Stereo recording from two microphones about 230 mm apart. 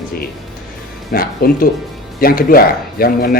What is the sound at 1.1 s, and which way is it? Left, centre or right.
Speech, left.